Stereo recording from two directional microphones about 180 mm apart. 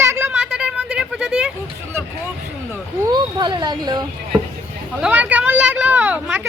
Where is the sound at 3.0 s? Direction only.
20° right (ahead or behind).